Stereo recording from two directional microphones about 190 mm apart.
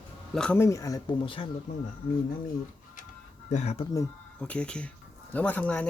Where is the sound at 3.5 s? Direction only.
35° left (ahead or behind).